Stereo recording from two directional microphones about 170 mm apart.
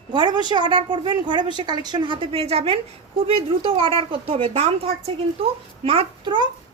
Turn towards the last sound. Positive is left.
turn(degrees=-30)  # may be behind; listen again after turning